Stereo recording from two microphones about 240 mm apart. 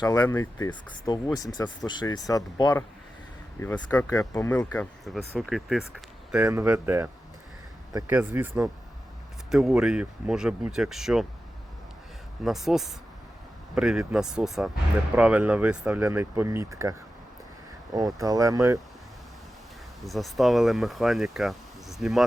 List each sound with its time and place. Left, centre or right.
0.0 s speech: centre
12.5 s speech: centre
20.1 s speech: centre